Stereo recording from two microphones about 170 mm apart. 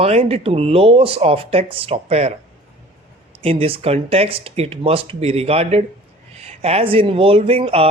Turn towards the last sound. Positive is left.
turn(degrees=-35)  # may be behind; listen again after turning